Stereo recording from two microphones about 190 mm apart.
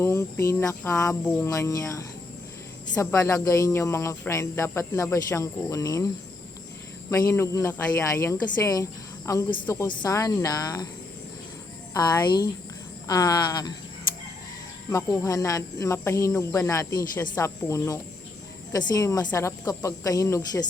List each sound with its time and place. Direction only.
0.0 s speech: 15° left (ahead or behind)
7.1 s speech: 15° left (ahead or behind)
11.9 s speech: 20° left (ahead or behind)
14.8 s speech: 15° left (ahead or behind)